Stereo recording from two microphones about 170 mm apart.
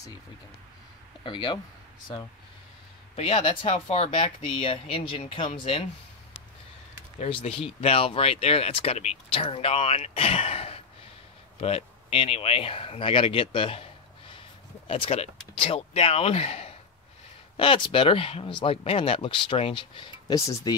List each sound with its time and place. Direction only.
1.2 s speech: 25° left (ahead or behind)
3.2 s speech: 35° left (ahead or behind)
7.4 s speech: 35° left (ahead or behind)
20.3 s speech: 20° left (ahead or behind)